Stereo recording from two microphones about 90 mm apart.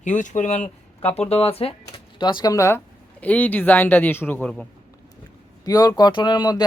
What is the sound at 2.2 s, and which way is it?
Speech, 55° left (ahead or behind).